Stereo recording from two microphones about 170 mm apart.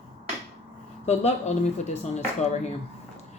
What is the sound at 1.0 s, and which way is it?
A woman's voice, 40° left (ahead or behind).